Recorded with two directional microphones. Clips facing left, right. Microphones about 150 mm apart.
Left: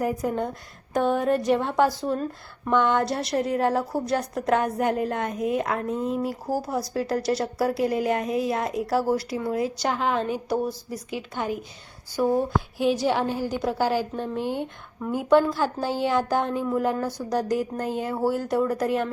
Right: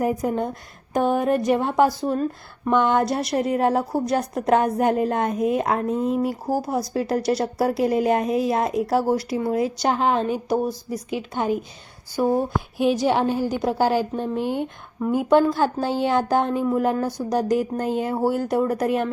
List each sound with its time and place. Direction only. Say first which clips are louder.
0.0 s a woman's voice: right 3 dB; 20° right (ahead or behind)